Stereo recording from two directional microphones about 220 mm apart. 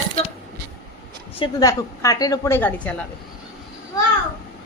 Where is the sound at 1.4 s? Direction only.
15° left (ahead or behind).